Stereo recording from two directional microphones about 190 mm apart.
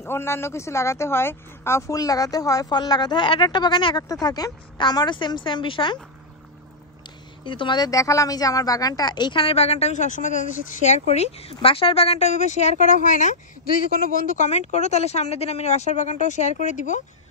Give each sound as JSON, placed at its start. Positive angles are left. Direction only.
{"t": 0.0, "sound": "speech", "side_deg": 15}
{"t": 7.4, "sound": "speech", "side_deg": 25}